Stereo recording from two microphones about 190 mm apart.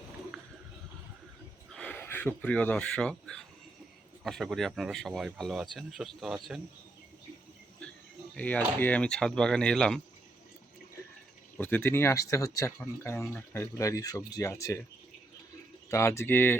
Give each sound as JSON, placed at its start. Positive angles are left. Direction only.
{"t": 1.7, "sound": "speech", "side_deg": 5}
{"t": 8.4, "sound": "speech", "side_deg": 10}
{"t": 11.5, "sound": "speech", "side_deg": 10}
{"t": 15.9, "sound": "speech", "side_deg": 15}